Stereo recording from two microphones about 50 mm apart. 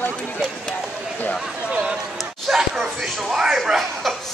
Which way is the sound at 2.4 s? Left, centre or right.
Centre.